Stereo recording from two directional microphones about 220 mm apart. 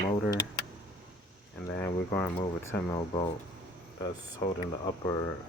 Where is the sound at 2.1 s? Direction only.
10° left (ahead or behind).